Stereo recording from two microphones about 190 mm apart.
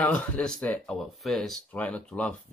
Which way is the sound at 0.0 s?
5° left (ahead or behind).